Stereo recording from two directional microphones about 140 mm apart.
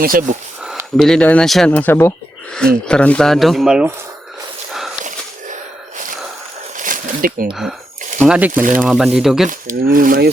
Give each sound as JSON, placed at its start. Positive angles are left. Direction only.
{"t": 0.0, "sound": "speech", "side_deg": -90}
{"t": 0.9, "sound": "speech", "side_deg": 5}
{"t": 1.7, "sound": "speech", "side_deg": 15}
{"t": 2.5, "sound": "speech", "side_deg": 5}
{"t": 6.7, "sound": "a sound", "side_deg": -75}
{"t": 7.5, "sound": "speech", "side_deg": -5}
{"t": 9.5, "sound": "speech", "side_deg": -75}